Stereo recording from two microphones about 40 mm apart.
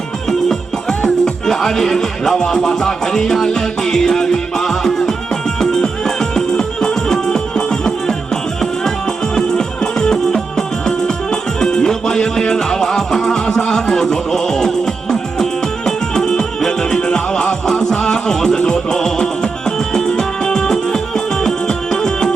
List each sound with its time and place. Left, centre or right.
0.3 s music: centre
9.3 s music: centre
15.9 s music: centre